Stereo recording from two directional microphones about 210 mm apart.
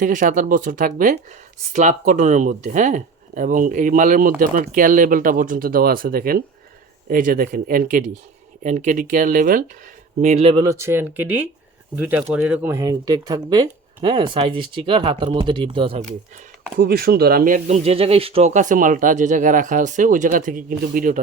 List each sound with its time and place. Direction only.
0.0 s speech: 40° right (ahead or behind)
10.8 s speech: 10° right (ahead or behind); by 16.1 s 30° right (ahead or behind)
16.7 s speech: 45° right (ahead or behind)